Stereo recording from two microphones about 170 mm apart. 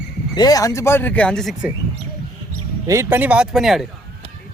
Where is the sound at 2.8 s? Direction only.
15° right (ahead or behind); by 3.8 s centre (ahead or behind).